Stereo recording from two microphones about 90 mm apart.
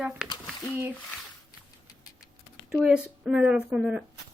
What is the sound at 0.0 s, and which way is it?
Speech, 15° right (ahead or behind).